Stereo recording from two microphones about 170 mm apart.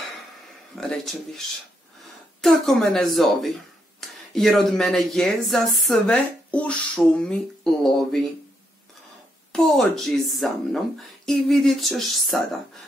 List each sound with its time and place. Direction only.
0.7 s speech: centre (ahead or behind)
9.5 s speech: centre (ahead or behind)